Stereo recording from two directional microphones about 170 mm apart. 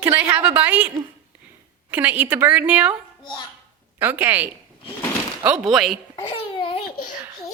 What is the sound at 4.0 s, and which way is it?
A woman's voice, 10° right (ahead or behind).